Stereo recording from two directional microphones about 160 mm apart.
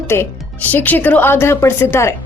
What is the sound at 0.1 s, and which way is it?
A woman's voice, 10° left (ahead or behind).